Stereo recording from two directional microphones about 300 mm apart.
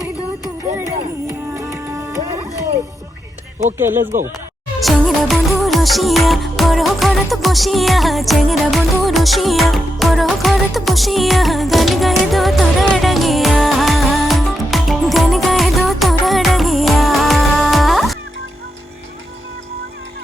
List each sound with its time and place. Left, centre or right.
1.3 s music: centre
3.8 s speech: centre
4.0 s speech: right
4.8 s music: centre